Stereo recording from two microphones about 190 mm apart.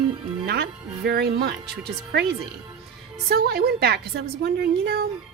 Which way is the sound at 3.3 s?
55° right (ahead or behind).